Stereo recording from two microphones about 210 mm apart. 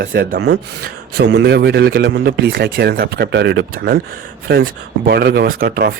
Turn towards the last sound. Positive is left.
turn(degrees=-45)  # may be behind; listen again after turning